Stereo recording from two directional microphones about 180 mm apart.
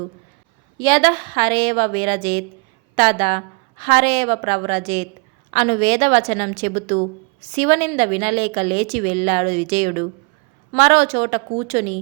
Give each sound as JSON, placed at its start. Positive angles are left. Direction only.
{"t": 0.8, "sound": "a woman's voice", "side_deg": -25}
{"t": 1.1, "sound": "a woman's voice", "side_deg": -55}
{"t": 1.4, "sound": "a woman's voice", "side_deg": -25}